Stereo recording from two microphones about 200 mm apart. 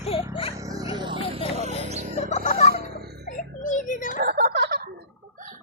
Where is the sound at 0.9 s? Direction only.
25° right (ahead or behind).